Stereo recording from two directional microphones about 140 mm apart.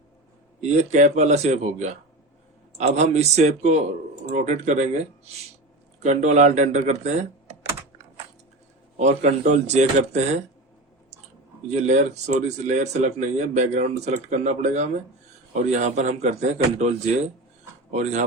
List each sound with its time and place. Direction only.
0.6 s a man's voice: 55° right (ahead or behind)
9.0 s speech: 55° right (ahead or behind)
11.7 s speech: 55° right (ahead or behind)
17.9 s speech: 55° right (ahead or behind)